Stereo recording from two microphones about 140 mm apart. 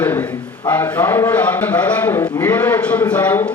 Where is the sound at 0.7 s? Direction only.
15° left (ahead or behind).